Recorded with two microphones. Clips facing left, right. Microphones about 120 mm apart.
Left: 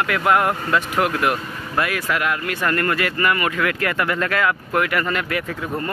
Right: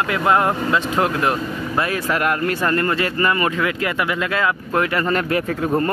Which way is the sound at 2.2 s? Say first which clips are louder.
Right 4 dB; 45° right (ahead or behind).